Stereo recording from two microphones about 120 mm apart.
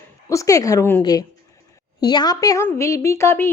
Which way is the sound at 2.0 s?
35° left (ahead or behind).